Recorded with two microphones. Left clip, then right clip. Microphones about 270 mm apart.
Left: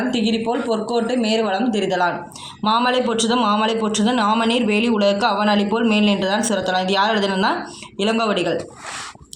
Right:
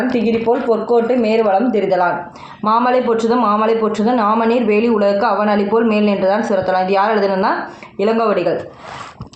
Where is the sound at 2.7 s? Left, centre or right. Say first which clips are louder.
Right 4 dB; left.